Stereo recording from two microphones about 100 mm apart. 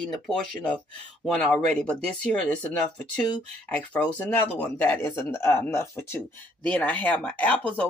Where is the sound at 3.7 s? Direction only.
15° left (ahead or behind).